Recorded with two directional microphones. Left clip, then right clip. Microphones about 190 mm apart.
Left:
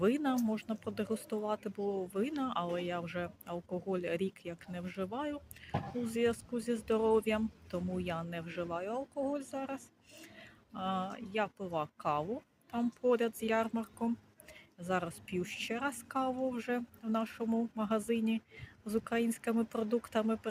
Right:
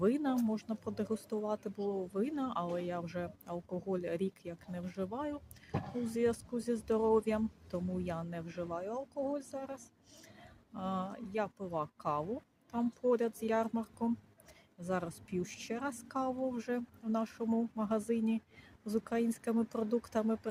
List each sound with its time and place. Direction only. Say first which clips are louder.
0.0 s speech: left 1 dB; 5° right (ahead or behind)
9.5 s a sound: left 3 dB; 5° right (ahead or behind)
10.8 s speech: left 2 dB; 5° right (ahead or behind)